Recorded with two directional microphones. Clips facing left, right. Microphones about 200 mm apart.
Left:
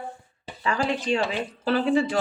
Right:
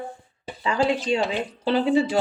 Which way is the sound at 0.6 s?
20° right (ahead or behind).